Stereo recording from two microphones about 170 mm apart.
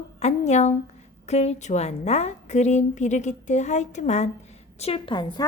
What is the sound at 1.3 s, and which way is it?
A woman's voice, 40° left (ahead or behind).